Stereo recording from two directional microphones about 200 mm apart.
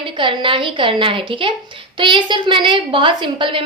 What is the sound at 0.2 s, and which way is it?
A woman's voice, 25° right (ahead or behind).